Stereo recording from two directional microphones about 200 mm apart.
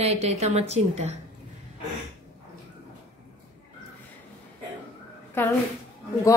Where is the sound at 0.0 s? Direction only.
30° right (ahead or behind).